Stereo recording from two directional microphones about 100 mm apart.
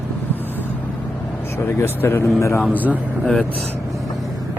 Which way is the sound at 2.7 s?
15° right (ahead or behind).